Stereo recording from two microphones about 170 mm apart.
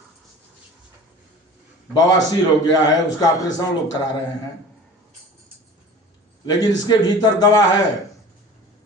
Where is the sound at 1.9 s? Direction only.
20° left (ahead or behind).